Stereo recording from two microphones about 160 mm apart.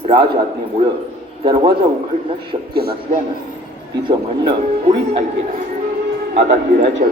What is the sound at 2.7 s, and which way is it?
Music, 75° right (ahead or behind).